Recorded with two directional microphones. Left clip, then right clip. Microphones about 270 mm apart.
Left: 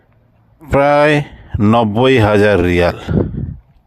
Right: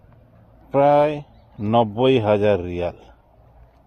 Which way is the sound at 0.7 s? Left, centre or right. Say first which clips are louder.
Left 5 dB; left.